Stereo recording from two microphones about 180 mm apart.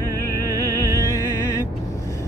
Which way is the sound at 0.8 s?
15° left (ahead or behind).